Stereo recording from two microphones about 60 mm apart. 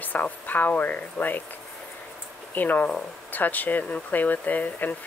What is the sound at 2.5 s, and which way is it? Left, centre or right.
Speech, left.